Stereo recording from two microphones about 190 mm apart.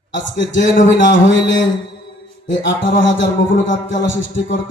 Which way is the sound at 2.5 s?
75° left (ahead or behind).